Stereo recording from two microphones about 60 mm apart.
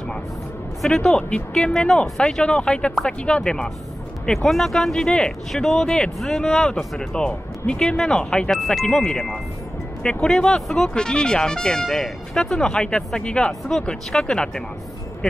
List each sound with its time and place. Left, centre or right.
0.8 s speech: centre
8.5 s speech: centre